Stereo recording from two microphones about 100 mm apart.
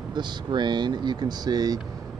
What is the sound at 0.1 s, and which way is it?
Speech, 50° right (ahead or behind).